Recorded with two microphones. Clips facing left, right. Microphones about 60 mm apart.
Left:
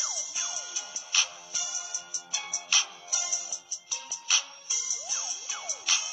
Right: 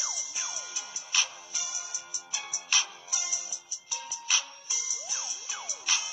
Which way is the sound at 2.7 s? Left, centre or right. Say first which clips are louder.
Even; right.